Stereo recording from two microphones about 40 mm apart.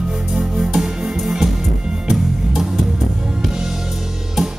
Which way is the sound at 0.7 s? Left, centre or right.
Centre.